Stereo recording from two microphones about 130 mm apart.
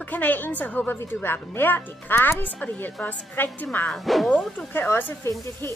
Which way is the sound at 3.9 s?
Centre (ahead or behind).